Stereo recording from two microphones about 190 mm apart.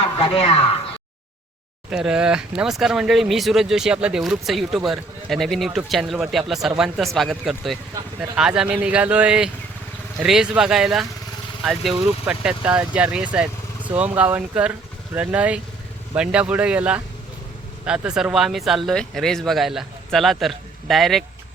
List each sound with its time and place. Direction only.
0.2 s speech: 30° left (ahead or behind)
1.9 s speech: 5° right (ahead or behind)